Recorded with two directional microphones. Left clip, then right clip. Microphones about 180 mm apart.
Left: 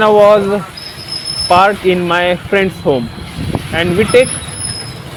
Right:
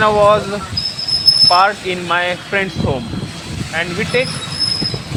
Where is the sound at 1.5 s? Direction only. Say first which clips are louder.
Left 4 dB; 65° left (ahead or behind).